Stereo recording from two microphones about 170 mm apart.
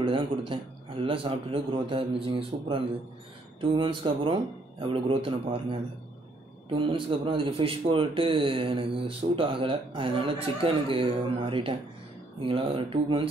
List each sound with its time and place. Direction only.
0.0 s speech: 30° right (ahead or behind)